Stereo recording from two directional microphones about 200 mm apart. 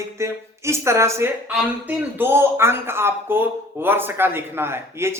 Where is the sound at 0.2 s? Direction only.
15° right (ahead or behind).